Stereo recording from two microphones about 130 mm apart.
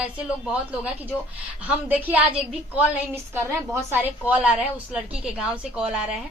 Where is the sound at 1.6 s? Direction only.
10° right (ahead or behind).